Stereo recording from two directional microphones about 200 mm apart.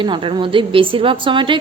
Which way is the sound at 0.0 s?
25° right (ahead or behind).